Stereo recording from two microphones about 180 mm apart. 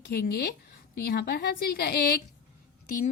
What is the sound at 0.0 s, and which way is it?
A woman's voice, 65° left (ahead or behind).